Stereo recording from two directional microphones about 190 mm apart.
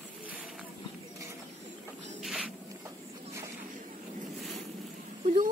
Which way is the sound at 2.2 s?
5° right (ahead or behind).